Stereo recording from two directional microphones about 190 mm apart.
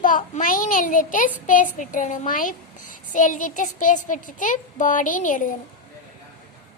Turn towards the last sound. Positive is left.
turn(degrees=45)  # may be behind; listen again after turning